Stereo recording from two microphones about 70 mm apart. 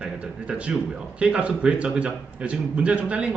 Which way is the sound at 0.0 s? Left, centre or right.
Centre.